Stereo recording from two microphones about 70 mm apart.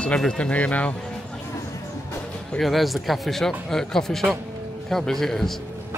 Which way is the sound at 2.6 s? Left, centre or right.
Centre.